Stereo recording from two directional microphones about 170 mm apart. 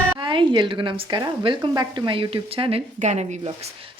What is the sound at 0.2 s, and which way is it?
A woman's voice, 30° right (ahead or behind).